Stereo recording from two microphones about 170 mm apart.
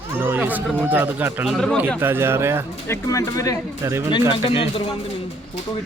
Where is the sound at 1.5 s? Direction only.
5° left (ahead or behind).